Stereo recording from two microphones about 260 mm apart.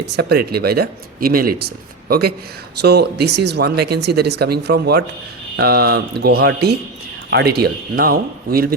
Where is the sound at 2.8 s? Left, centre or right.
Right.